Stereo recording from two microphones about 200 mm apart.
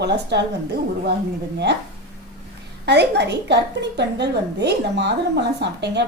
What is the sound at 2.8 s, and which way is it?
A woman's voice, 55° right (ahead or behind).